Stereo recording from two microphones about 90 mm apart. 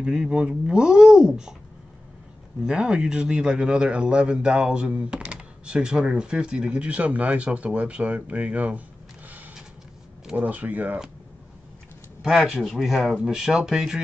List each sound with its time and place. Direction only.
0.0 s a man's voice: 10° right (ahead or behind)
2.6 s a man's voice: 10° right (ahead or behind)
10.2 s a man's voice: 15° right (ahead or behind)
12.2 s a man's voice: 5° right (ahead or behind)